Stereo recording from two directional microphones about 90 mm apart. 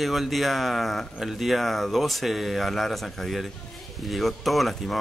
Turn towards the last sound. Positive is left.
turn(degrees=0)  # may be behind; listen again after turning